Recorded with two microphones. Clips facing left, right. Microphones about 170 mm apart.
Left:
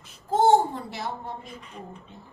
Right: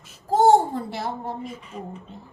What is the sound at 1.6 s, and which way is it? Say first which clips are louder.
Speech: right 5 dB; 5° right (ahead or behind).